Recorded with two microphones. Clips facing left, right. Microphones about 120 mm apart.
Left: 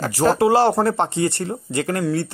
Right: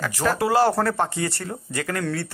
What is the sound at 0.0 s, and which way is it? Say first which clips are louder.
Speech: left 6 dB; 30° left (ahead or behind).